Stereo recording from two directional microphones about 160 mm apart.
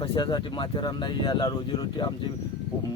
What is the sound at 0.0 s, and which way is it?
Speech, 30° left (ahead or behind).